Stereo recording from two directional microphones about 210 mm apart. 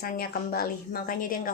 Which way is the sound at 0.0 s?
45° left (ahead or behind).